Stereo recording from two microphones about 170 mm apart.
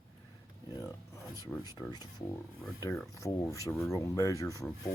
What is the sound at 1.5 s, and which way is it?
Speech, 5° left (ahead or behind).